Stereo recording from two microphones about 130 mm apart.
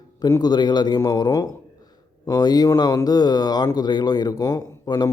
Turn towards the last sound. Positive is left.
turn(degrees=30)  # may be behind; listen again after turning